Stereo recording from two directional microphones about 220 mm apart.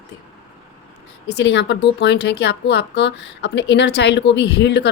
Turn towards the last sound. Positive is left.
turn(degrees=50)  # may be behind; listen again after turning